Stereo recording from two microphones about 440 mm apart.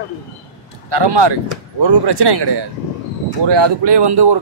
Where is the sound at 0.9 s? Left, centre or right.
Right.